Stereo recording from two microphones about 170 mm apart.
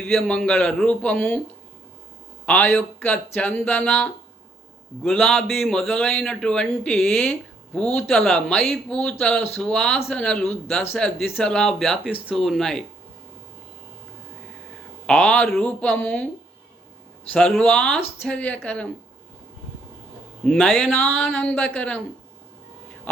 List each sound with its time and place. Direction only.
0.1 s a man's voice: 5° left (ahead or behind)
2.5 s a man's voice: 10° left (ahead or behind)
15.0 s speech: 5° left (ahead or behind)
17.3 s a man's voice: 5° left (ahead or behind)
20.4 s speech: 5° left (ahead or behind)